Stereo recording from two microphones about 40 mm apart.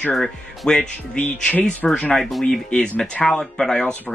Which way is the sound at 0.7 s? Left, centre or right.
Left.